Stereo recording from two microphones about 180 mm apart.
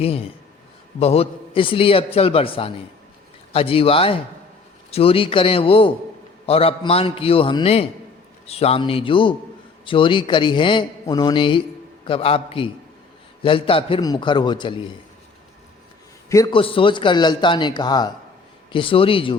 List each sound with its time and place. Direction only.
0.0 s a man's voice: 35° left (ahead or behind)
16.3 s a man's voice: 20° left (ahead or behind)
16.6 s a man's voice: 30° left (ahead or behind)